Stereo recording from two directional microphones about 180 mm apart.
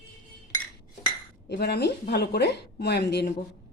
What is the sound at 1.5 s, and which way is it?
Speech, 65° left (ahead or behind).